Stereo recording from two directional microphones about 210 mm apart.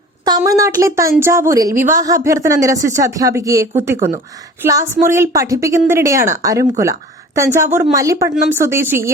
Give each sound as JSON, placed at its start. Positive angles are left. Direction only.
{"t": 0.3, "sound": "speech", "side_deg": -20}